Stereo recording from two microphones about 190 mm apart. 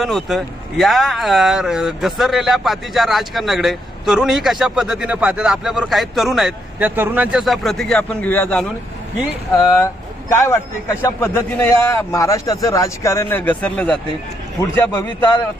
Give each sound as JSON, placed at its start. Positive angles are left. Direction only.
{"t": 0.0, "sound": "a man's voice", "side_deg": 0}